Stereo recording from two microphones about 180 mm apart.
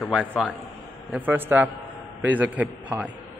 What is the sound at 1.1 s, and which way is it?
Speech, 10° right (ahead or behind).